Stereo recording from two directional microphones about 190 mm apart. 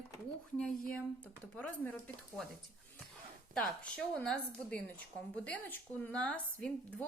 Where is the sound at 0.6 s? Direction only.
5° left (ahead or behind).